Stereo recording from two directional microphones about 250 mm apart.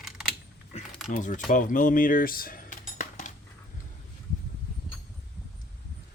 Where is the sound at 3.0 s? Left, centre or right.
Left.